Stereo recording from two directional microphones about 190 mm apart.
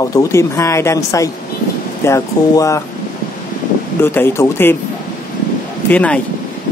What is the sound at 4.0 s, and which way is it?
Speech, 10° left (ahead or behind).